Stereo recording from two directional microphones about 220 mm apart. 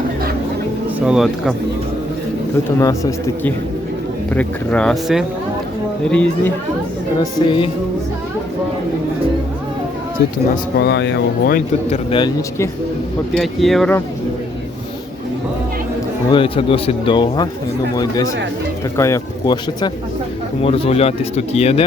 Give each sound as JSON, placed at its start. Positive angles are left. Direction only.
{"t": 1.0, "sound": "speech", "side_deg": 0}
{"t": 2.7, "sound": "speech", "side_deg": 15}
{"t": 7.2, "sound": "speech", "side_deg": 20}
{"t": 10.5, "sound": "speech", "side_deg": 50}
{"t": 11.9, "sound": "speech", "side_deg": 25}
{"t": 13.3, "sound": "speech", "side_deg": 0}
{"t": 16.3, "sound": "speech", "side_deg": 25}
{"t": 20.6, "sound": "speech", "side_deg": 25}